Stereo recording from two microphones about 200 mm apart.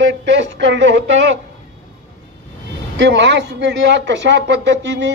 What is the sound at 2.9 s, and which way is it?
A man's voice, 65° right (ahead or behind).